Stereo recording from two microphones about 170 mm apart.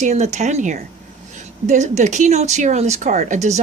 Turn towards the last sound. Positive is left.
turn(degrees=-40)  # may be behind; listen again after turning